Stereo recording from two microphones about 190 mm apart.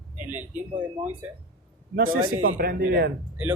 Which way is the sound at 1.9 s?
50° right (ahead or behind).